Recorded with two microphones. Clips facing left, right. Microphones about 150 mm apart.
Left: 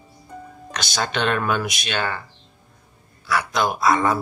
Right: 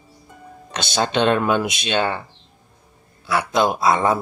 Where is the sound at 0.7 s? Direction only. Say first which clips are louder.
Right 5 dB; 25° right (ahead or behind).